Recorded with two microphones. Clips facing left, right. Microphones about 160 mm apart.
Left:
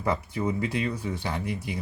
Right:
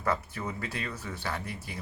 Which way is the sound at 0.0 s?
15° left (ahead or behind).